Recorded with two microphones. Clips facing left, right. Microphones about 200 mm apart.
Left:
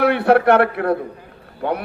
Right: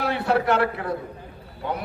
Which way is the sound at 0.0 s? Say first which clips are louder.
Left 8 dB; 60° left (ahead or behind).